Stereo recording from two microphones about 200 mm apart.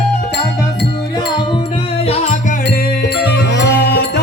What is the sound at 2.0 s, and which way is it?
Music, 30° left (ahead or behind).